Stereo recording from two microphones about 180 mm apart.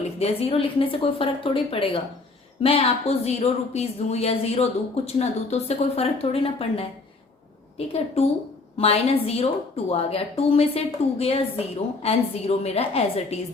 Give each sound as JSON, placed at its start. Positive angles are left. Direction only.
{"t": 0.2, "sound": "speech", "side_deg": 35}
{"t": 7.9, "sound": "speech", "side_deg": 35}